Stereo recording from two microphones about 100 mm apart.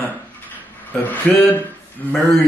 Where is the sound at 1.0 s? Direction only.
20° left (ahead or behind).